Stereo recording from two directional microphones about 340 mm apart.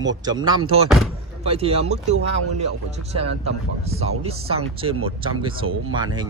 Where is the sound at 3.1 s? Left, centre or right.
Centre.